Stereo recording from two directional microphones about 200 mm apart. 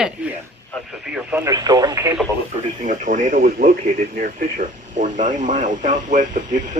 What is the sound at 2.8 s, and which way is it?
Speech, 40° right (ahead or behind).